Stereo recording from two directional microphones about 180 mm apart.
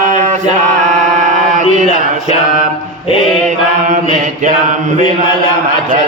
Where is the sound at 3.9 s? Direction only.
45° right (ahead or behind).